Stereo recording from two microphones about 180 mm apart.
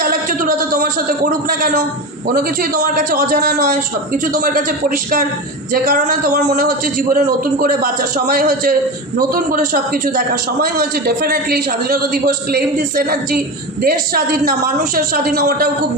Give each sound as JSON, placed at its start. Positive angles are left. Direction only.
{"t": 0.0, "sound": "a sound", "side_deg": -50}
{"t": 2.3, "sound": "a man's voice", "side_deg": -50}
{"t": 5.7, "sound": "a man's voice", "side_deg": -45}